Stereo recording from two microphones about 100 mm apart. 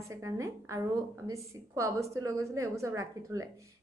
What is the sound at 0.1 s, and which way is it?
A woman's voice, 30° right (ahead or behind).